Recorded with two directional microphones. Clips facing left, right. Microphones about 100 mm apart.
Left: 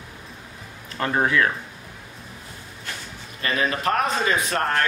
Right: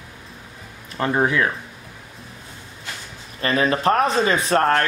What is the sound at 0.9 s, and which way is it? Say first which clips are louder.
Speech: right 2 dB; 15° right (ahead or behind).